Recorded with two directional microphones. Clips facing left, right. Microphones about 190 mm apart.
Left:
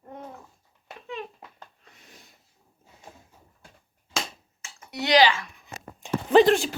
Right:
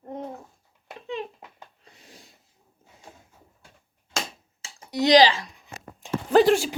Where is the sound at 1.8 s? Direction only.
30° right (ahead or behind).